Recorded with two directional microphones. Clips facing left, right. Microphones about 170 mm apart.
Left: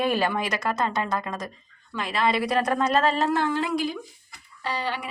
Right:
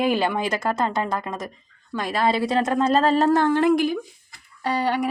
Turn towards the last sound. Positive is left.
turn(degrees=-50)  # may be behind; listen again after turning